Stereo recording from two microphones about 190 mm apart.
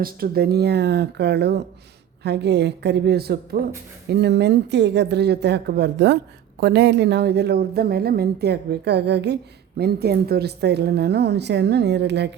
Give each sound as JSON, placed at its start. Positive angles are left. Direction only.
{"t": 0.0, "sound": "a woman's voice", "side_deg": -55}